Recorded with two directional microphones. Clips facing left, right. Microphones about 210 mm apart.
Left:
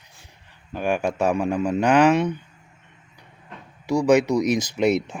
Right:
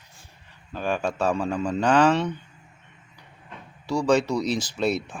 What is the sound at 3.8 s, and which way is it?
Speech, 20° left (ahead or behind).